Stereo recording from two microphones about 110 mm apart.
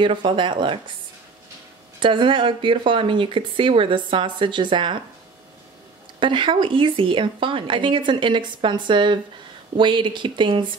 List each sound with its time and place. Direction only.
0.0 s speech: 45° right (ahead or behind)
2.0 s speech: 50° right (ahead or behind)
6.1 s speech: 50° right (ahead or behind)